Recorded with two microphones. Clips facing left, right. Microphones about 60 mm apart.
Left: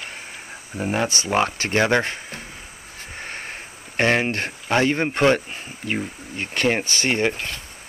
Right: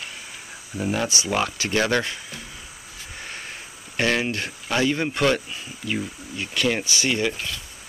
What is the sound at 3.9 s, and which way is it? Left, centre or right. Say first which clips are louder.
A man's voice: left 3 dB; left.